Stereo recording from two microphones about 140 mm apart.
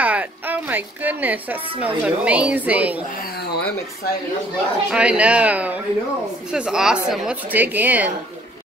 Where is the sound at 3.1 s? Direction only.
90° left.